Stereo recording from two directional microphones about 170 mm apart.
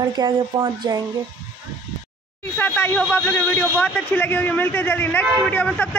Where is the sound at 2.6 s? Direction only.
10° left (ahead or behind).